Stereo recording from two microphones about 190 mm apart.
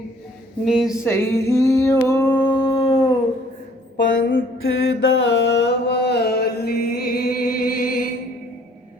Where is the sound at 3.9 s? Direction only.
75° left (ahead or behind).